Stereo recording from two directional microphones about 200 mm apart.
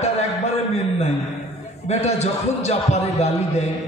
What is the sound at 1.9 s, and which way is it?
A man's voice, 35° left (ahead or behind).